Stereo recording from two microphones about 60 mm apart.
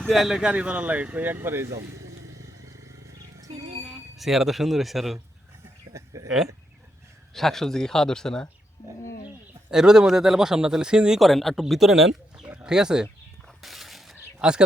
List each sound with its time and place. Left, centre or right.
0.1 s speech: centre
0.5 s speech: right
1.4 s speech: right
3.8 s speech: centre
5.9 s a sound: right
7.3 s speech: centre
9.6 s speech: centre
11.2 s speech: centre
13.6 s mechanisms: centre
14.3 s speech: centre